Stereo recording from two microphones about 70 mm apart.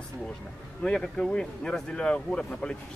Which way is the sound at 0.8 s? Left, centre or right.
Centre.